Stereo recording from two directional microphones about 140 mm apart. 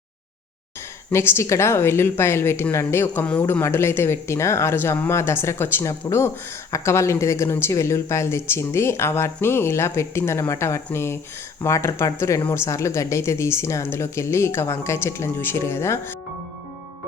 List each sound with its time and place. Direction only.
1.1 s speech: 20° left (ahead or behind)